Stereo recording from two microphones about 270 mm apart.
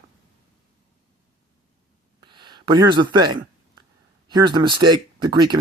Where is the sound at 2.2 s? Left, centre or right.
Centre.